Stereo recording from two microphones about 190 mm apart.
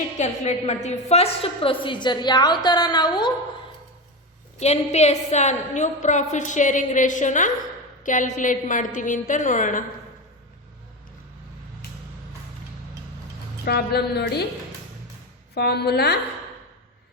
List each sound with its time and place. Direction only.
0.2 s a woman's voice: 35° left (ahead or behind)
4.6 s a woman's voice: 35° left (ahead or behind)
13.7 s a woman's voice: 55° left (ahead or behind)
15.5 s a woman's voice: 60° left (ahead or behind)